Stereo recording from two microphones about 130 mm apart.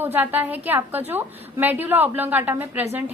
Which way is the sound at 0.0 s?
15° right (ahead or behind).